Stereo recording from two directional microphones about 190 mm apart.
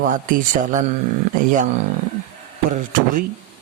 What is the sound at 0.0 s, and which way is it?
Speech, 45° right (ahead or behind).